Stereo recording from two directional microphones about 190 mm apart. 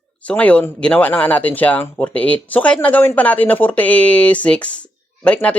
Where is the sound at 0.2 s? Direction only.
5° left (ahead or behind).